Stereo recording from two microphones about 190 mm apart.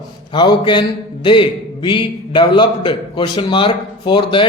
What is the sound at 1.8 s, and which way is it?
A man's voice, 25° left (ahead or behind).